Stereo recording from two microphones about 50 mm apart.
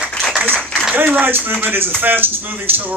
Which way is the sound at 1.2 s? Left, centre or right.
Right.